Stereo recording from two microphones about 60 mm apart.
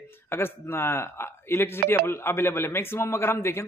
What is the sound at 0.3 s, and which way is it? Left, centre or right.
A man's voice, left.